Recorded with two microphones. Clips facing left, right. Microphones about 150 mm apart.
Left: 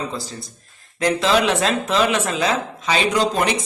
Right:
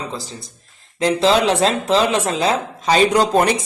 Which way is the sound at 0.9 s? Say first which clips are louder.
Right 3 dB; 30° right (ahead or behind).